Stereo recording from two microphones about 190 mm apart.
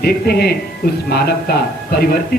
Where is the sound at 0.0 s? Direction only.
55° left (ahead or behind).